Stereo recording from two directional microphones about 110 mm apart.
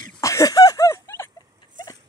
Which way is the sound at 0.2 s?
30° left (ahead or behind).